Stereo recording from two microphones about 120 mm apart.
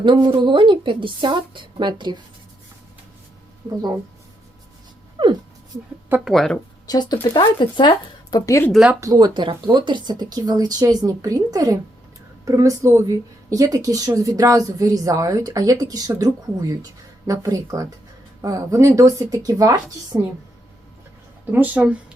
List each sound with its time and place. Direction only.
0.0 s a woman's voice: 40° right (ahead or behind)
6.2 s speech: centre (ahead or behind)
6.8 s speech: 35° left (ahead or behind)
9.0 s a woman's voice: 30° right (ahead or behind)
21.5 s speech: 15° right (ahead or behind)